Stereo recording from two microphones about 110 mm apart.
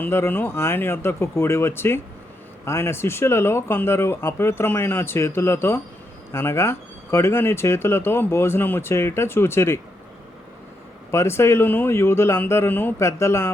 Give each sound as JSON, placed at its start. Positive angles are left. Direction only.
{"t": 0.0, "sound": "speech", "side_deg": 20}
{"t": 11.1, "sound": "speech", "side_deg": 25}